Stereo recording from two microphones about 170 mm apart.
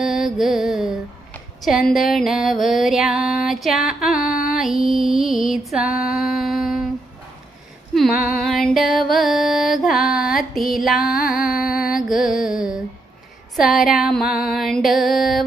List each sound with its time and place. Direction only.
0.0 s music: centre (ahead or behind)
1.3 s a sound: centre (ahead or behind)
1.9 s music: centre (ahead or behind)
4.1 s music: 55° left (ahead or behind)
4.5 s music: centre (ahead or behind)
6.1 s humming: centre (ahead or behind)
7.9 s music: centre (ahead or behind)